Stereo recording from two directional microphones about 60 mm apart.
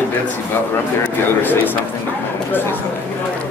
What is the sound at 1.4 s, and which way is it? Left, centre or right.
Speech, left.